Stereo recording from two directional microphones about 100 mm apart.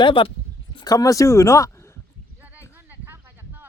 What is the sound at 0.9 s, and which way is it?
Speech, 35° left (ahead or behind).